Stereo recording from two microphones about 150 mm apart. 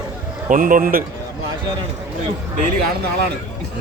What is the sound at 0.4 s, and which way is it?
Speech, 65° right (ahead or behind).